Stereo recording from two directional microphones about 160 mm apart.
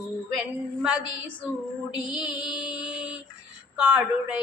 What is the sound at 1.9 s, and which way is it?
Music, 30° left (ahead or behind).